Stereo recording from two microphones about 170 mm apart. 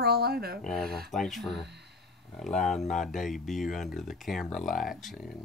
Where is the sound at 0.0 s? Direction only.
70° right (ahead or behind).